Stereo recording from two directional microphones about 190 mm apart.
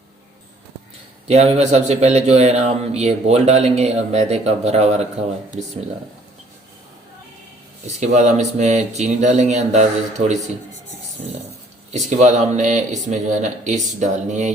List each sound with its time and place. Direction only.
1.3 s speech: 35° right (ahead or behind)
7.9 s speech: 35° right (ahead or behind)
11.9 s speech: 40° right (ahead or behind)